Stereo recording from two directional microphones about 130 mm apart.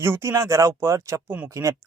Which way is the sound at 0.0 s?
20° right (ahead or behind).